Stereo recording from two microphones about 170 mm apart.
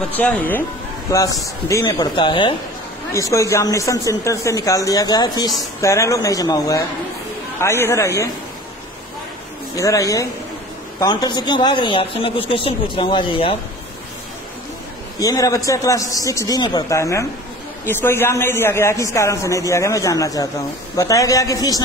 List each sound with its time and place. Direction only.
0.2 s a man's voice: 10° left (ahead or behind)
9.8 s a man's voice: 20° left (ahead or behind)
15.1 s a man's voice: 20° left (ahead or behind)